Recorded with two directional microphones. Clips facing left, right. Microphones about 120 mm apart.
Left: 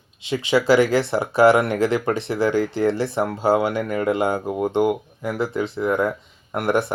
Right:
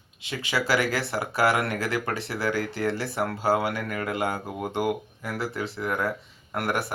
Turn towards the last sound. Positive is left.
turn(degrees=20)  # may be behind; listen again after turning